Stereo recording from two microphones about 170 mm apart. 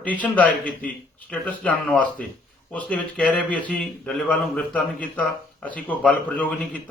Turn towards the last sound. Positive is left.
turn(degrees=5)  # may be behind; listen again after turning